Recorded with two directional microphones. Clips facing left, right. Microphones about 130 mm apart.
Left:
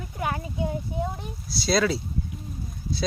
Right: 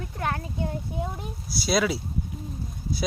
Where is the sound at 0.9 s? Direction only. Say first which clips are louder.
Left 2 dB; 5° right (ahead or behind).